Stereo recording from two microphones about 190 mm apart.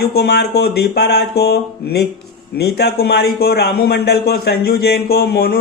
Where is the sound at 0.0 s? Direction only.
55° left (ahead or behind).